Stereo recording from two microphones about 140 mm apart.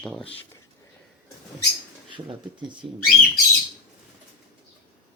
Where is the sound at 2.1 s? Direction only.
35° right (ahead or behind).